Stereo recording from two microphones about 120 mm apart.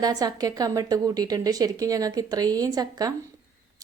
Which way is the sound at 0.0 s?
30° right (ahead or behind).